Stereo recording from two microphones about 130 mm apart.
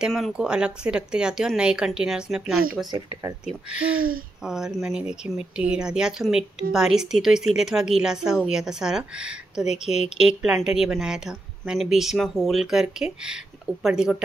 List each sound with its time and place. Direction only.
0.0 s a woman's voice: centre (ahead or behind)
2.9 s speech: 30° right (ahead or behind)
3.4 s a woman's voice: 10° right (ahead or behind)